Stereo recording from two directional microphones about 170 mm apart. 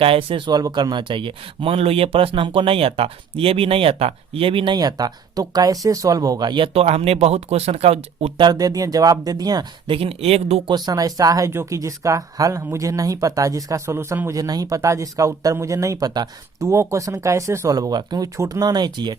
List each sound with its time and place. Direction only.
0.0 s speech: 35° right (ahead or behind)
8.4 s speech: 20° right (ahead or behind)
10.8 s speech: 20° right (ahead or behind)